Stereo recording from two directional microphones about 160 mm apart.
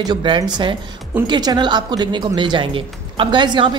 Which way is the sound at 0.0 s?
30° right (ahead or behind).